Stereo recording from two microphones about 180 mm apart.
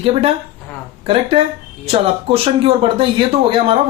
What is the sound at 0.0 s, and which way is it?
Speech, 35° right (ahead or behind).